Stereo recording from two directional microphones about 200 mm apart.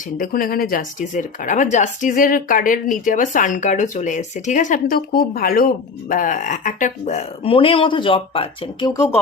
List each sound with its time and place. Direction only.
0.2 s speech: 45° left (ahead or behind); by 9.1 s 15° left (ahead or behind)